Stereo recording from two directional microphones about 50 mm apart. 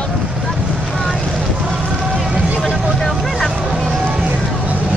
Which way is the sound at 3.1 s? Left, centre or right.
Centre.